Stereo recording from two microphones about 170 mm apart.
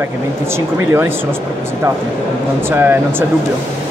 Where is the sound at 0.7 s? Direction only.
15° right (ahead or behind).